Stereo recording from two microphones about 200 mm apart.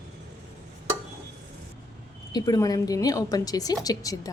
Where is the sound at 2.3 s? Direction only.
20° left (ahead or behind).